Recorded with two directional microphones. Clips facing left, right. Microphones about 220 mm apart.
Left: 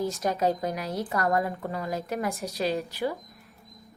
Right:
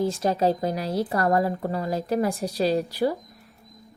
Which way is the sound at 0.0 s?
30° right (ahead or behind).